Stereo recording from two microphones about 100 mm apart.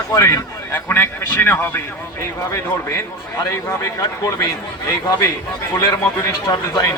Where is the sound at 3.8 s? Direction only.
35° left (ahead or behind).